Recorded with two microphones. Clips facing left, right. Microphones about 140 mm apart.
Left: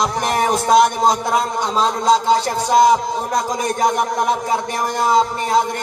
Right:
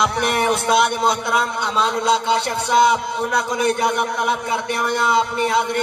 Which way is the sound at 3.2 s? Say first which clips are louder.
Left 1 dB; 35° left (ahead or behind).